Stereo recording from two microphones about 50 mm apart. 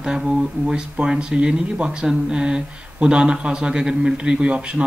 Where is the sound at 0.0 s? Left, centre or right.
Centre.